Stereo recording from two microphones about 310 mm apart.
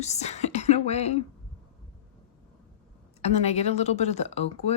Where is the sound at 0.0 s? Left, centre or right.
Left.